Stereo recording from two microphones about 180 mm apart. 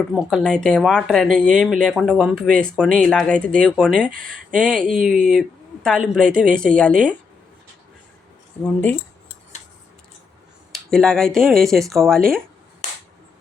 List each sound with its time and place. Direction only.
0.1 s speech: 5° right (ahead or behind)
4.1 s speech: 50° right (ahead or behind)
4.5 s speech: 5° left (ahead or behind)
8.6 s speech: 10° left (ahead or behind)
10.7 s speech: 5° left (ahead or behind)